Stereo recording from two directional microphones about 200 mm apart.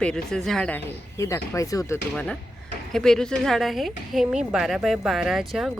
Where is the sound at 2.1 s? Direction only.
5° left (ahead or behind).